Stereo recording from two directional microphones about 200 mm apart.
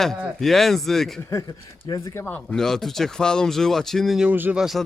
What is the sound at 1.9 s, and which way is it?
Speech, 15° left (ahead or behind).